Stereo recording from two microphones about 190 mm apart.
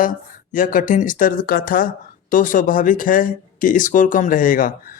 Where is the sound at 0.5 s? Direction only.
45° left (ahead or behind).